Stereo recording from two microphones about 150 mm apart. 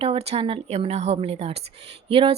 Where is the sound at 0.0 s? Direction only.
40° right (ahead or behind).